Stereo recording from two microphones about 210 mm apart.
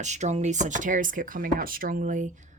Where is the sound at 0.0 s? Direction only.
35° right (ahead or behind).